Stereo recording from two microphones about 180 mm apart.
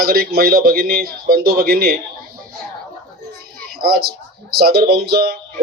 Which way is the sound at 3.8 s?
60° right (ahead or behind).